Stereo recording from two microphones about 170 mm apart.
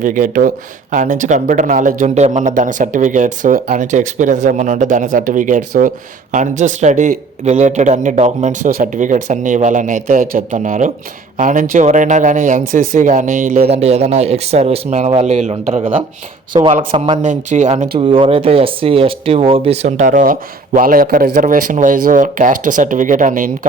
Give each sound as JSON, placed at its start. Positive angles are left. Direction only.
{"t": 0.0, "sound": "speech", "side_deg": -50}
{"t": 13.7, "sound": "speech", "side_deg": -40}
{"t": 17.2, "sound": "speech", "side_deg": -45}
{"t": 17.9, "sound": "speech", "side_deg": -30}